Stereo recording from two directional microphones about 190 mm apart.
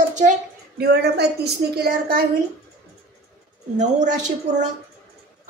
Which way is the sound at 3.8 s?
40° right (ahead or behind).